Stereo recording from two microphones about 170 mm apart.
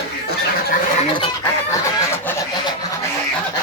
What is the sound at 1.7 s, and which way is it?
Fowl, 15° left (ahead or behind).